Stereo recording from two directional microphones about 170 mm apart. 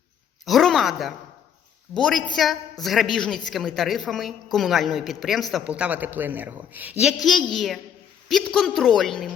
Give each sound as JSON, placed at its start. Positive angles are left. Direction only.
{"t": 0.4, "sound": "a sound", "side_deg": 0}
{"t": 2.0, "sound": "a woman's voice", "side_deg": 5}
{"t": 7.5, "sound": "a woman's voice", "side_deg": 0}